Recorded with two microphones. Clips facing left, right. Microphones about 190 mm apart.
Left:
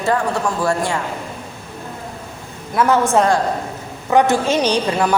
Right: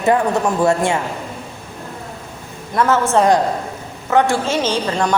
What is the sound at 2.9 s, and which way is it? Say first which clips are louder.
A woman's voice: right 1 dB; 15° left (ahead or behind).